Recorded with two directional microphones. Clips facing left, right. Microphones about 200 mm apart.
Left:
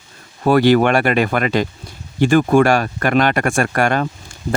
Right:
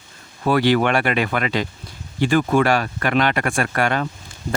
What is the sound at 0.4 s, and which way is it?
Speech, 45° left (ahead or behind).